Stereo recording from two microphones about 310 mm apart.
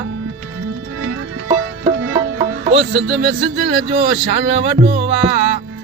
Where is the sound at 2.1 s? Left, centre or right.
Centre.